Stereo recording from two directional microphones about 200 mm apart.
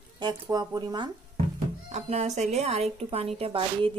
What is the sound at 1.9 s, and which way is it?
Speech, 35° right (ahead or behind).